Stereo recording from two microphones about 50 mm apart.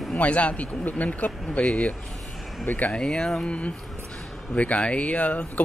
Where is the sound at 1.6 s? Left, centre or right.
Centre.